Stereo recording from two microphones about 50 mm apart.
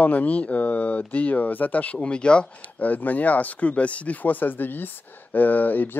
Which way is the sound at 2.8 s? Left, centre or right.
Left.